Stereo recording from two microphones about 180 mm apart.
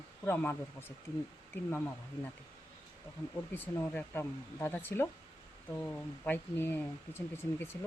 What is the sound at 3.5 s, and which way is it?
Speech, 10° left (ahead or behind).